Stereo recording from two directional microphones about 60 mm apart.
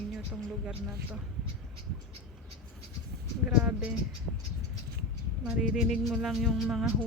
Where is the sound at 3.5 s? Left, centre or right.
Centre.